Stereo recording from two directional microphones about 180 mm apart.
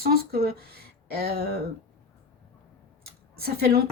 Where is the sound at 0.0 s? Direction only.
55° right (ahead or behind).